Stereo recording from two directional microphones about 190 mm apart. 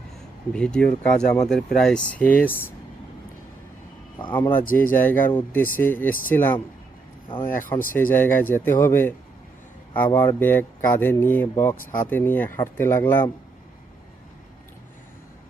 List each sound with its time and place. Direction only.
0.5 s speech: 5° left (ahead or behind)
4.4 s speech: 10° left (ahead or behind)
7.9 s speech: 10° left (ahead or behind)